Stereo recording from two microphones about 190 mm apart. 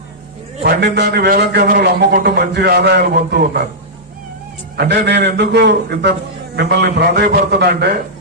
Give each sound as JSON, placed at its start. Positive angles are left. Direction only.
{"t": 0.6, "sound": "a man's voice", "side_deg": -60}
{"t": 4.8, "sound": "a man's voice", "side_deg": -60}